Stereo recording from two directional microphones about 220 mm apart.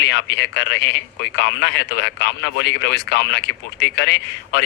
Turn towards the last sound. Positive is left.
turn(degrees=50)  # may be behind; listen again after turning